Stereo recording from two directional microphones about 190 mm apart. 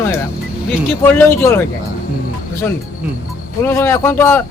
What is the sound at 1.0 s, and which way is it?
Speech, 10° left (ahead or behind).